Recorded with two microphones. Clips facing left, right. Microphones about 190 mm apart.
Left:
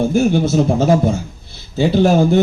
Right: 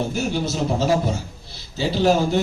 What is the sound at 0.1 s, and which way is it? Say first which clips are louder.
A man's voice: left 9 dB; 50° left (ahead or behind).